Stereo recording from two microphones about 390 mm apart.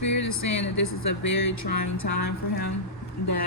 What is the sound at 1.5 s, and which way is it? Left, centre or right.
Speech, left.